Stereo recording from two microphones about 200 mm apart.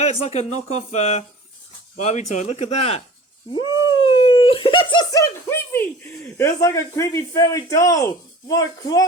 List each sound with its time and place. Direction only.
0.0 s speech: 35° left (ahead or behind)
3.5 s a sound: 25° left (ahead or behind)
6.3 s speech: 15° left (ahead or behind)